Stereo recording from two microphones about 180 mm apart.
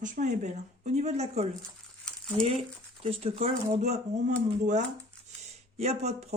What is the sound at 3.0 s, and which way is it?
Speech, 35° right (ahead or behind).